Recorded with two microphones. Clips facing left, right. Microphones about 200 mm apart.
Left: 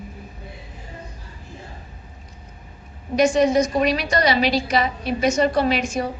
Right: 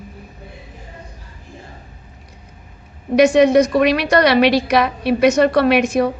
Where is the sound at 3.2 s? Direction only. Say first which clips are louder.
Right 6 dB; 65° right (ahead or behind).